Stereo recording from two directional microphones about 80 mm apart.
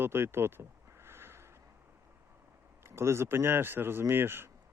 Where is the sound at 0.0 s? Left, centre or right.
Right.